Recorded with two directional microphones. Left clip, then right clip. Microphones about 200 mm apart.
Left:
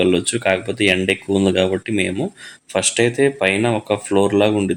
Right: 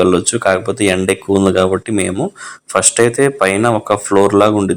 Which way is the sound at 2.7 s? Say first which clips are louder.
Right 5 dB; 10° right (ahead or behind).